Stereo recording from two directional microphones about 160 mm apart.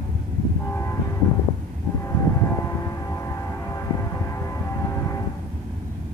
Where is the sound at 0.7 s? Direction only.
15° left (ahead or behind).